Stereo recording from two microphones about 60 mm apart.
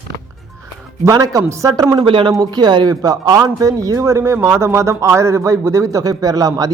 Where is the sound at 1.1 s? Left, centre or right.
Right.